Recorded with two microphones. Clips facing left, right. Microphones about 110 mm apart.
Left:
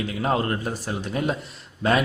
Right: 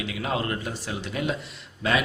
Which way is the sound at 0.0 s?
40° left (ahead or behind).